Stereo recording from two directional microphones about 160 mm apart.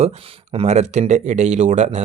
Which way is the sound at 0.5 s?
45° right (ahead or behind).